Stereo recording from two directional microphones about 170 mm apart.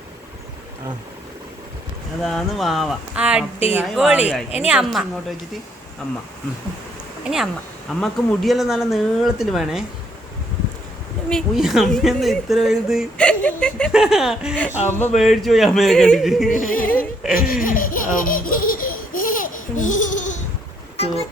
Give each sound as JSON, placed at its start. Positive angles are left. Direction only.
{"t": 2.2, "sound": "speech", "side_deg": 0}
{"t": 7.3, "sound": "speech", "side_deg": 0}
{"t": 11.3, "sound": "speech", "side_deg": 0}
{"t": 14.5, "sound": "speech", "side_deg": 10}
{"t": 15.1, "sound": "speech", "side_deg": 0}
{"t": 16.5, "sound": "speech", "side_deg": 50}
{"t": 16.8, "sound": "speech", "side_deg": 10}
{"t": 17.3, "sound": "laughter", "side_deg": 60}